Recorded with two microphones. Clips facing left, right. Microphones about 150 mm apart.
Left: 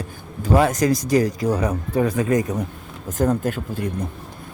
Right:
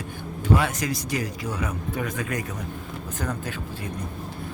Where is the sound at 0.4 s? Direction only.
40° left (ahead or behind); by 2.6 s 20° left (ahead or behind).